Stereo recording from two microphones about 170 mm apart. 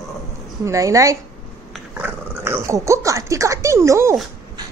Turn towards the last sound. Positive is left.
turn(degrees=-15)  # may be behind; listen again after turning